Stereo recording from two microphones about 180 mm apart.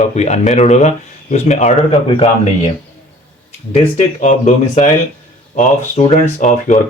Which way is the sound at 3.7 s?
45° left (ahead or behind).